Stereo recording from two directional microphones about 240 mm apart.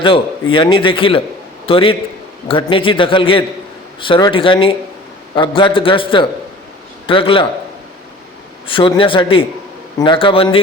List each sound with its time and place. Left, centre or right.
0.0 s a man's voice: left
8.6 s a man's voice: left